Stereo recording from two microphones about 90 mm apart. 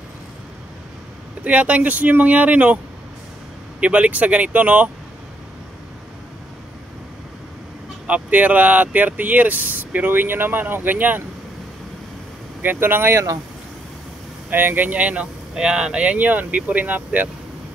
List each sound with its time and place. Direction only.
1.4 s speech: 15° right (ahead or behind)
3.8 s speech: 15° right (ahead or behind)
8.1 s speech: 15° right (ahead or behind)
12.6 s speech: 25° right (ahead or behind)
14.5 s speech: 20° right (ahead or behind)